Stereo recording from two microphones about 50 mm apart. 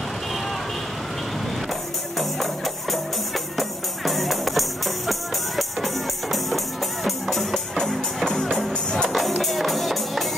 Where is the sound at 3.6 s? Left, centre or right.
Centre.